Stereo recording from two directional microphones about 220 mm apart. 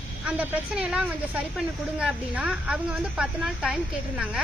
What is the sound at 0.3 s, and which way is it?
Speech, 5° right (ahead or behind).